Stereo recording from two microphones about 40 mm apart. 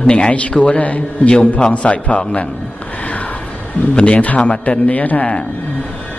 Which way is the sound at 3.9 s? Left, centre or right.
Left.